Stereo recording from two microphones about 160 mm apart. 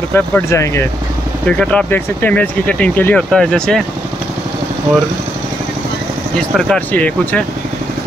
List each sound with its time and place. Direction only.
0.1 s speech: 15° left (ahead or behind)
6.5 s speech: 5° left (ahead or behind)